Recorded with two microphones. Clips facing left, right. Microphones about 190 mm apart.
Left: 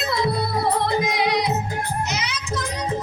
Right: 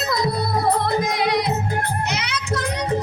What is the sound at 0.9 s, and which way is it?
Music, 50° right (ahead or behind).